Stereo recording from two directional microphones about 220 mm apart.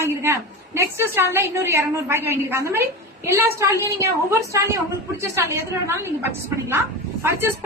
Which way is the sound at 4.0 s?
15° right (ahead or behind).